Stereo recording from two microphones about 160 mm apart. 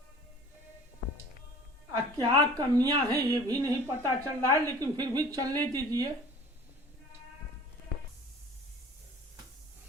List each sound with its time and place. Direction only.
1.9 s a woman's voice: 25° right (ahead or behind)